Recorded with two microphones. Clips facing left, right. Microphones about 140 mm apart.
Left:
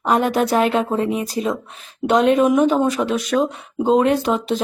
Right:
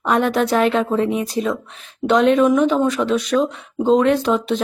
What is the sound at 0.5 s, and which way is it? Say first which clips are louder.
Speech: right 1 dB; 5° left (ahead or behind).